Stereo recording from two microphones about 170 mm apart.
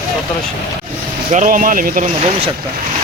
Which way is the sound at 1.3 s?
50° right (ahead or behind).